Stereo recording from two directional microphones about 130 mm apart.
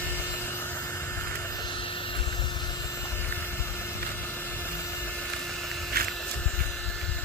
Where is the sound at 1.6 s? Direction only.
40° left (ahead or behind); by 5.1 s 20° left (ahead or behind).